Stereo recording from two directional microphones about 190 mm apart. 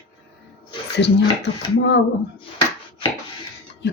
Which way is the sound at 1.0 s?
65° left (ahead or behind).